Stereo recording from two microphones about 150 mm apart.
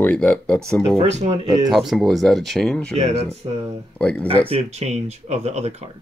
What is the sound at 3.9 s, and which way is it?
Speech, 10° left (ahead or behind).